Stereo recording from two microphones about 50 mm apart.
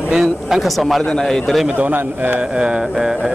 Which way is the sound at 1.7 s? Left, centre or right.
Right.